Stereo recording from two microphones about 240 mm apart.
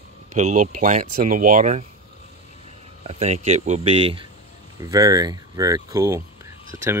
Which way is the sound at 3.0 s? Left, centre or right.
Right.